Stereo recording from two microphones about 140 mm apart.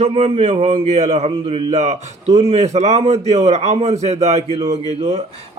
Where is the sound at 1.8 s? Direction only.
55° right (ahead or behind).